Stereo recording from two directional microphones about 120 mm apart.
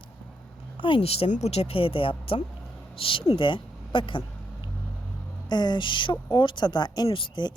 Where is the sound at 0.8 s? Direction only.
45° left (ahead or behind).